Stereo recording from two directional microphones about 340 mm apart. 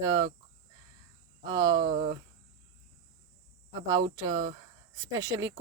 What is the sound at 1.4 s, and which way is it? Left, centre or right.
Speech, centre.